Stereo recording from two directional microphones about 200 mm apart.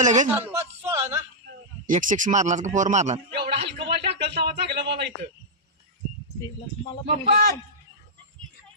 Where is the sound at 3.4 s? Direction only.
55° right (ahead or behind).